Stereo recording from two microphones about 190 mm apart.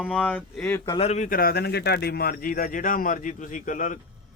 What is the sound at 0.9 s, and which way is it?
A man's voice, 35° left (ahead or behind).